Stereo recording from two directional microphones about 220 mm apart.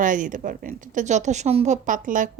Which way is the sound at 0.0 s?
35° right (ahead or behind).